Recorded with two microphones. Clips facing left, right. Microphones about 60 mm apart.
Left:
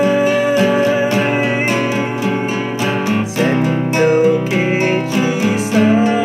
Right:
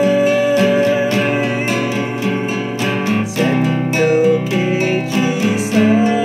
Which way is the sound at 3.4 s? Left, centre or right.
Left.